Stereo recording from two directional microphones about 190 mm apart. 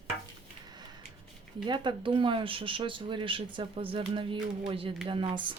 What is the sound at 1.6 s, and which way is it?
Speech, 25° right (ahead or behind).